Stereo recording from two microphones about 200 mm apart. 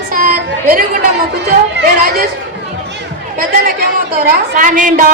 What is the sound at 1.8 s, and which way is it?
Speech, 45° right (ahead or behind).